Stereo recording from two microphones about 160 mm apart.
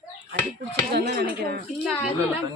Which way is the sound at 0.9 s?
90° right.